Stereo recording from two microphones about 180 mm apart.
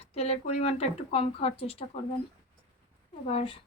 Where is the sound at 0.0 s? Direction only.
35° left (ahead or behind).